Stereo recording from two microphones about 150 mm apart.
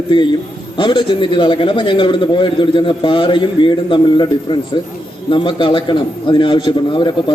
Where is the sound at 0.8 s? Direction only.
30° left (ahead or behind).